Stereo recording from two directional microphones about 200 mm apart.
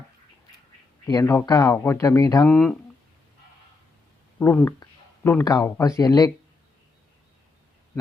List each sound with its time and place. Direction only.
1.0 s speech: 15° left (ahead or behind)
2.5 s speech: 5° left (ahead or behind)
4.4 s speech: 10° left (ahead or behind)